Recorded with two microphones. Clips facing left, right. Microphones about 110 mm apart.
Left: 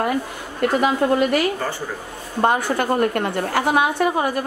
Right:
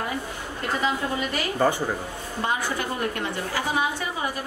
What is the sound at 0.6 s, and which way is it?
Speech, 65° left (ahead or behind).